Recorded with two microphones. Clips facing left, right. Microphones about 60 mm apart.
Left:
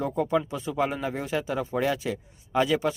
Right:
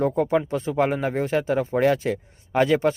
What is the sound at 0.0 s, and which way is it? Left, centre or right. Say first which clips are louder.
Speech: right 4 dB; right.